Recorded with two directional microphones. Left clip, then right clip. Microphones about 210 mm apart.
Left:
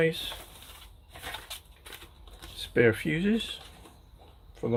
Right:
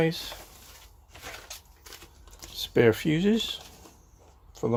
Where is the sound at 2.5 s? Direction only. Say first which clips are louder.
Right 2 dB; 35° right (ahead or behind).